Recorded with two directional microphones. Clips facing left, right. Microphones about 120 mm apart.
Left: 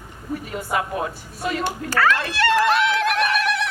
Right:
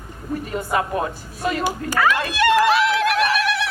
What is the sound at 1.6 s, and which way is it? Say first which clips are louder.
Speech: even; 10° right (ahead or behind).